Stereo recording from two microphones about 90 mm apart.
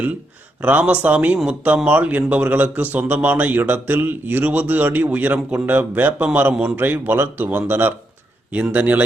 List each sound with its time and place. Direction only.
0.6 s a man's voice: 15° right (ahead or behind)
6.7 s a man's voice: 20° right (ahead or behind)